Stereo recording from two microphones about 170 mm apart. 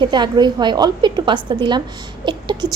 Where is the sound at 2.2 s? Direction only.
25° right (ahead or behind).